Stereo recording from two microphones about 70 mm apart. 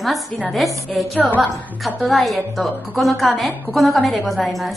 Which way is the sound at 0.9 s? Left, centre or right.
Centre.